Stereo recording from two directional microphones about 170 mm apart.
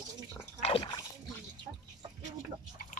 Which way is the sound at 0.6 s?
30° left (ahead or behind).